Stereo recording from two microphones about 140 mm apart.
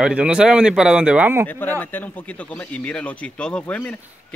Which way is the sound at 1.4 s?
15° left (ahead or behind).